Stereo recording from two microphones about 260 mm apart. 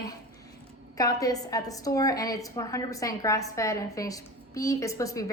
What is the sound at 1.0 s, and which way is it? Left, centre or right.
A woman's voice, centre.